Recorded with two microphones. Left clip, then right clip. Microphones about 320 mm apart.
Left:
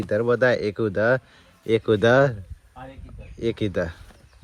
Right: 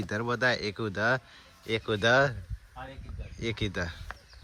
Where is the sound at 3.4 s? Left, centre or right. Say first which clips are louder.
Left 8 dB; centre.